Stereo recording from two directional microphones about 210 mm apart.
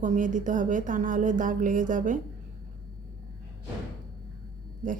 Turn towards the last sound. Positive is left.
turn(degrees=-40)  # may be behind; listen again after turning